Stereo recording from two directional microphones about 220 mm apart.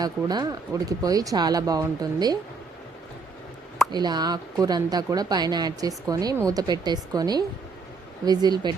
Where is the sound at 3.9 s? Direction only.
20° right (ahead or behind).